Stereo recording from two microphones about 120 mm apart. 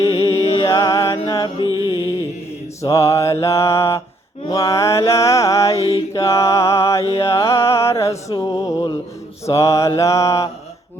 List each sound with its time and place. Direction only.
0.6 s music: 35° left (ahead or behind)
1.6 s music: 30° right (ahead or behind)
2.8 s music: 25° left (ahead or behind)
5.7 s mantra: 55° left (ahead or behind)
6.1 s music: 25° left (ahead or behind)